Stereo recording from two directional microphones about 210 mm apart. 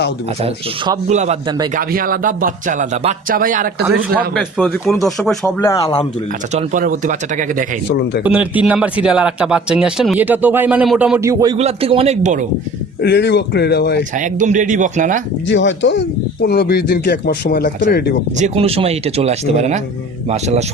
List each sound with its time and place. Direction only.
0.4 s speech: 30° right (ahead or behind)
1.7 s speech: 45° right (ahead or behind)
4.4 s speech: centre (ahead or behind)
5.8 s speech: 20° left (ahead or behind)
6.5 s speech: 35° right (ahead or behind)
7.9 s speech: 55° left (ahead or behind)
8.2 s speech: 5° right (ahead or behind)
11.5 s speech: 30° right (ahead or behind)
13.0 s speech: 55° left (ahead or behind)
14.2 s speech: 35° right (ahead or behind)
15.4 s speech: 60° left (ahead or behind)
18.3 s speech: 30° right (ahead or behind)